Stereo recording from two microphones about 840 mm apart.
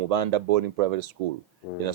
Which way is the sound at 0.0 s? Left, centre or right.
Right.